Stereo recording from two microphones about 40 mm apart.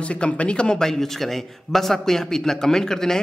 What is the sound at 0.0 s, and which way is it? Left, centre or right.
Speech, left.